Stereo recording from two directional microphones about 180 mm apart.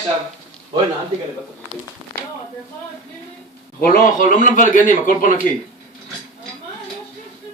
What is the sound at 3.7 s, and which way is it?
A man's voice, 50° left (ahead or behind).